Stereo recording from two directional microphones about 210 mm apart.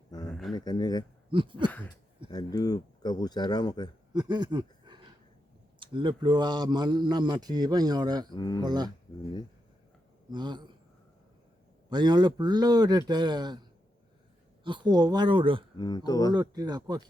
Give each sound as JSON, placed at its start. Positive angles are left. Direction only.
{"t": 0.1, "sound": "a sound", "side_deg": 20}
{"t": 0.5, "sound": "speech", "side_deg": 20}
{"t": 1.3, "sound": "speech", "side_deg": -25}
{"t": 2.3, "sound": "speech", "side_deg": 20}
{"t": 4.1, "sound": "a sound", "side_deg": -20}
{"t": 5.8, "sound": "speech", "side_deg": -20}
{"t": 8.3, "sound": "speech", "side_deg": 20}
{"t": 8.6, "sound": "speech", "side_deg": -20}
{"t": 10.2, "sound": "speech", "side_deg": -20}
{"t": 11.9, "sound": "speech", "side_deg": -20}
{"t": 15.8, "sound": "speech", "side_deg": 20}
{"t": 16.3, "sound": "speech", "side_deg": -20}